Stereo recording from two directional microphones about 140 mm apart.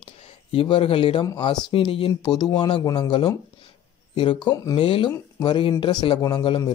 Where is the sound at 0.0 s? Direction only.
40° left (ahead or behind).